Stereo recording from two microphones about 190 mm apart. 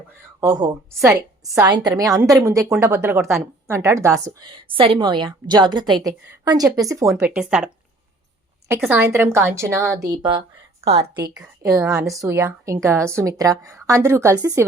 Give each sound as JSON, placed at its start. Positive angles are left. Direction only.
{"t": 0.3, "sound": "a woman's voice", "side_deg": -20}
{"t": 7.3, "sound": "speech", "side_deg": -5}
{"t": 8.8, "sound": "a woman's voice", "side_deg": -10}
{"t": 10.2, "sound": "a woman's voice", "side_deg": -25}
{"t": 11.3, "sound": "a woman's voice", "side_deg": -15}